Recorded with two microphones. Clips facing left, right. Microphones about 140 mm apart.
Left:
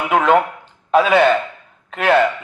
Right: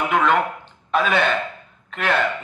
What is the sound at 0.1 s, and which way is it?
A man's voice, 45° left (ahead or behind).